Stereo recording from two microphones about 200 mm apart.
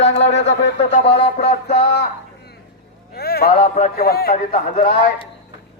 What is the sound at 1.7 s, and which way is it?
Speech, 55° left (ahead or behind).